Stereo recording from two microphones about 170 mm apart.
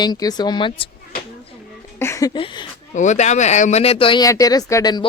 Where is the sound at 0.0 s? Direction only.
25° left (ahead or behind).